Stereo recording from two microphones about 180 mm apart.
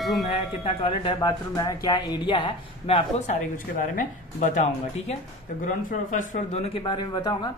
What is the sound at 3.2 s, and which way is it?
A woman's voice, 45° left (ahead or behind).